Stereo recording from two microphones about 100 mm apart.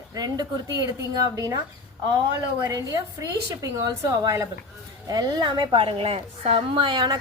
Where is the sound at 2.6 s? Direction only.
35° right (ahead or behind); by 7.1 s 50° right (ahead or behind).